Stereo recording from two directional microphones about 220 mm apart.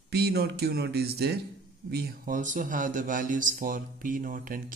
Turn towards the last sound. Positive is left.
turn(degrees=-40)  # may be behind; listen again after turning